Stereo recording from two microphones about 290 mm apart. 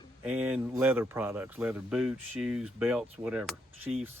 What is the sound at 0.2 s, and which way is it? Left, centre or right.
Speech, centre.